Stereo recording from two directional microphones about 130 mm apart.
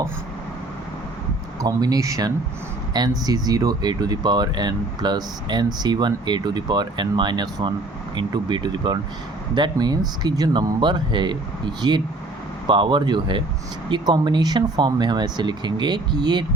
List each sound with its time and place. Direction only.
1.6 s speech: 30° right (ahead or behind)